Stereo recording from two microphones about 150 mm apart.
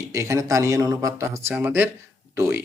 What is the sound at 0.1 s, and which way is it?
A man's voice, 20° right (ahead or behind).